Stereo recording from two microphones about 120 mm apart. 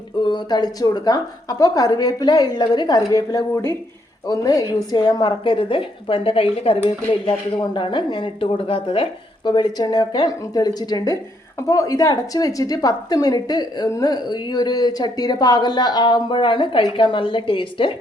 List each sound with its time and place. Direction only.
0.3 s a woman's voice: 35° left (ahead or behind)